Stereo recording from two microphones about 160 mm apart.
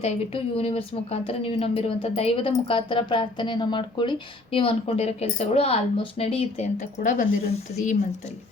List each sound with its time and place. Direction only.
0.0 s speech: 35° left (ahead or behind); by 7.5 s 55° left (ahead or behind)